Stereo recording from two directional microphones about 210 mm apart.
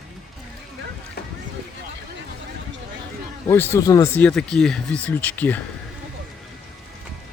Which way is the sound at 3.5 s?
10° left (ahead or behind).